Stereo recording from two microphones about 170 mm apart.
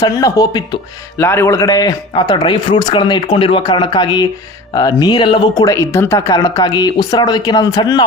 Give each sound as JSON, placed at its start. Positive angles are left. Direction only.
{"t": 0.0, "sound": "speech", "side_deg": 20}